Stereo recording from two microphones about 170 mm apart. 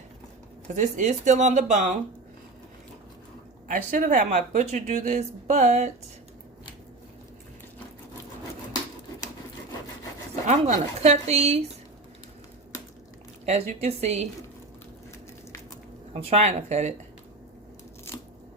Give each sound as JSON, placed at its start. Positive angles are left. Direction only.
{"t": 0.8, "sound": "speech", "side_deg": -45}
{"t": 3.7, "sound": "speech", "side_deg": -55}
{"t": 10.4, "sound": "speech", "side_deg": -45}
{"t": 13.4, "sound": "speech", "side_deg": -40}
{"t": 16.1, "sound": "speech", "side_deg": -40}